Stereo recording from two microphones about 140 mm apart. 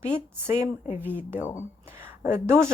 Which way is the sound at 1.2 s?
10° right (ahead or behind).